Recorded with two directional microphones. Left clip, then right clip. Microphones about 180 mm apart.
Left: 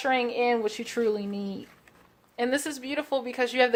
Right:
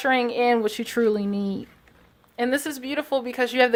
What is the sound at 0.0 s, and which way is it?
A woman's voice, 30° right (ahead or behind).